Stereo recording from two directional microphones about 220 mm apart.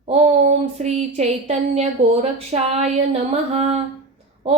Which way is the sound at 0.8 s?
30° right (ahead or behind).